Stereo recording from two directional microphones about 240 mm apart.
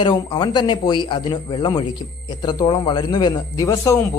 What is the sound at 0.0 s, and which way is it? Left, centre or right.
A man's voice, centre.